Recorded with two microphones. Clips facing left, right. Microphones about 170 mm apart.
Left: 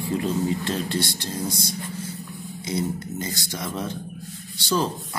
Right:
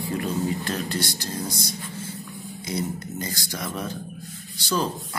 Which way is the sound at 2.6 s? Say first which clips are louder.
Left 2 dB; 25° left (ahead or behind).